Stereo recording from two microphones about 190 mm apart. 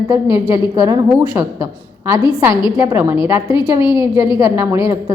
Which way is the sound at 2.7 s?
10° right (ahead or behind).